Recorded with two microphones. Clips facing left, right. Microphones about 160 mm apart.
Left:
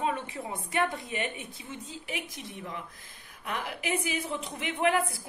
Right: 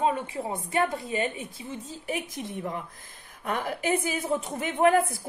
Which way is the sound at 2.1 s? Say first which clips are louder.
Right 8 dB; 50° right (ahead or behind).